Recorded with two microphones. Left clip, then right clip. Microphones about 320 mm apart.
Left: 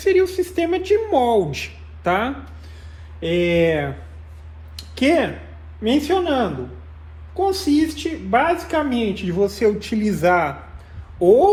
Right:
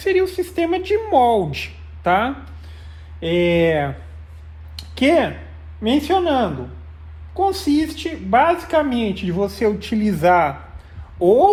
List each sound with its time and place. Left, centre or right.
0.0 s speech: right